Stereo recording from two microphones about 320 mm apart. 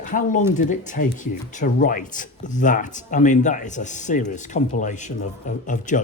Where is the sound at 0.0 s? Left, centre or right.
Left.